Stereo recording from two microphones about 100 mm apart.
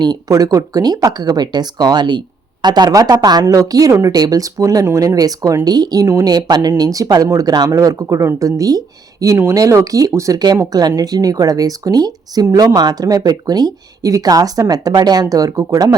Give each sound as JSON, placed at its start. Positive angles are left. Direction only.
{"t": 0.0, "sound": "speech", "side_deg": -40}